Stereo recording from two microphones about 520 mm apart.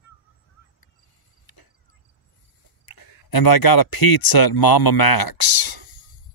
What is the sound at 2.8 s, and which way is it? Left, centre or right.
Speech, left.